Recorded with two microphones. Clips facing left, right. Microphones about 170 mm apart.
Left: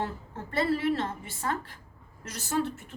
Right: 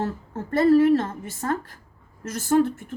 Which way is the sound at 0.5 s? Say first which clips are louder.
Right 10 dB; 45° right (ahead or behind).